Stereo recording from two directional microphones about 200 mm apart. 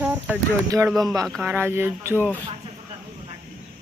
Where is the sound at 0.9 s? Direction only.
Centre (ahead or behind).